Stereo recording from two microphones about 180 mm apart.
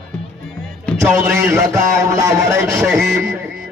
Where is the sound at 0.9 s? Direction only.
15° right (ahead or behind).